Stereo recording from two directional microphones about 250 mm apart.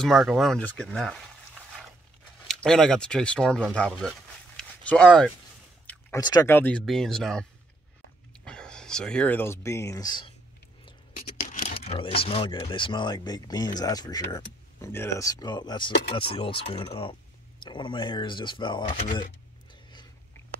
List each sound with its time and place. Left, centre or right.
0.0 s speech: centre
2.4 s speech: centre
4.6 s a sound: centre
5.9 s speech: centre
8.5 s speech: centre
11.1 s speech: left
19.7 s biting: centre